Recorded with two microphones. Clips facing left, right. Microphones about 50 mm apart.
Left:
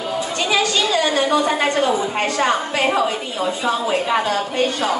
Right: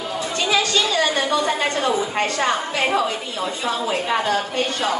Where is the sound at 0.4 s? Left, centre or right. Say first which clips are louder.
Even; centre.